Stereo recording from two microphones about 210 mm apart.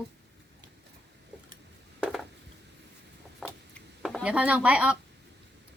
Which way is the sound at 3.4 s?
Centre (ahead or behind).